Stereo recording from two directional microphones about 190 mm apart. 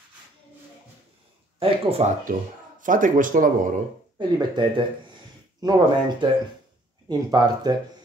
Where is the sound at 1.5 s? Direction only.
30° right (ahead or behind).